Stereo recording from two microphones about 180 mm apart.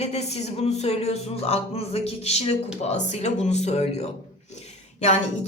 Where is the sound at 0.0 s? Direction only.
35° left (ahead or behind).